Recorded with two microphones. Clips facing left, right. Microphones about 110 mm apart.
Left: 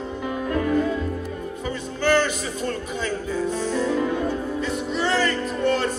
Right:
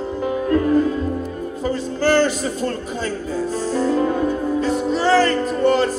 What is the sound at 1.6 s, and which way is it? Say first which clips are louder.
Speech: right 5 dB; 35° right (ahead or behind).